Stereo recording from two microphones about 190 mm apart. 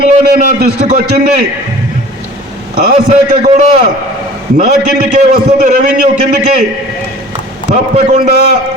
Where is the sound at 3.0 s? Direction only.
35° right (ahead or behind).